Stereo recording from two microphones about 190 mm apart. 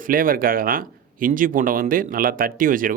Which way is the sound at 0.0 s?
45° right (ahead or behind).